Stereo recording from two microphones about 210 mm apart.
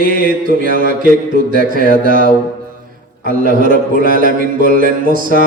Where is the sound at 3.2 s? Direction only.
40° right (ahead or behind).